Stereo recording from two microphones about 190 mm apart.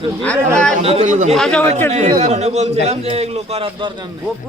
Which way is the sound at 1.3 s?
5° left (ahead or behind).